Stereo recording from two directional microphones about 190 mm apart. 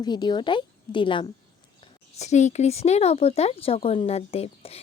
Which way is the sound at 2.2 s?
35° left (ahead or behind).